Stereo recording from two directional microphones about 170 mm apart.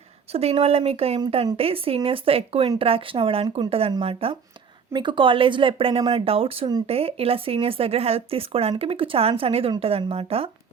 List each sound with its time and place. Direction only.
0.3 s speech: 35° right (ahead or behind)